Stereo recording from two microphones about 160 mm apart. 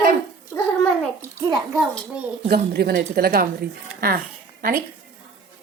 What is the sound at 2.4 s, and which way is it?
A woman's voice, 80° right.